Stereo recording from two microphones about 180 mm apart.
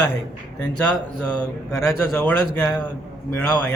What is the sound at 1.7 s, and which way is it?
Speech, 5° left (ahead or behind).